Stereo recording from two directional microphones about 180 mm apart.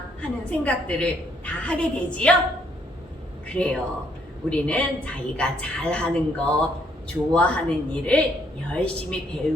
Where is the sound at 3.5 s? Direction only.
5° left (ahead or behind).